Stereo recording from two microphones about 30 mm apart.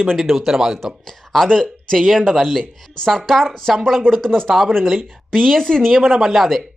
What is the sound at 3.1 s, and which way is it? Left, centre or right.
Speech, centre.